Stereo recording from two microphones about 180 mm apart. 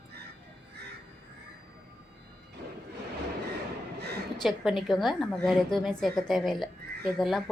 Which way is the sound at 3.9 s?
65° right (ahead or behind).